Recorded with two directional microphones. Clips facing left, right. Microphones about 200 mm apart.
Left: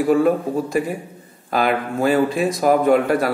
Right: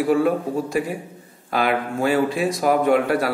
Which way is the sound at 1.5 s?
40° left (ahead or behind).